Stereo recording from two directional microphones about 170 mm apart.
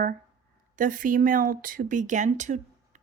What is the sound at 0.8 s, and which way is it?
A woman's voice, 50° right (ahead or behind).